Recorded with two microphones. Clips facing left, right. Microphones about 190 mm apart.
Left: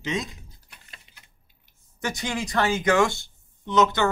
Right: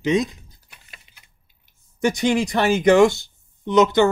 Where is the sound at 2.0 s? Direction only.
15° right (ahead or behind).